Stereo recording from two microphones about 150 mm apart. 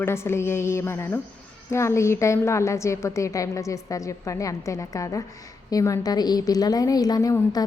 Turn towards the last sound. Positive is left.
turn(degrees=25)  # may be behind; listen again after turning